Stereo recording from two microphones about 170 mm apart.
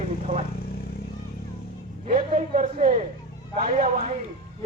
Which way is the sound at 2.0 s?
45° right (ahead or behind).